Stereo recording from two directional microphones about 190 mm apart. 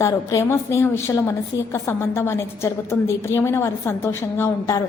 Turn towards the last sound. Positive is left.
turn(degrees=15)  # may be behind; listen again after turning